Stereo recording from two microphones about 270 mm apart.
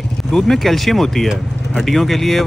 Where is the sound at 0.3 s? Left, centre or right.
Centre.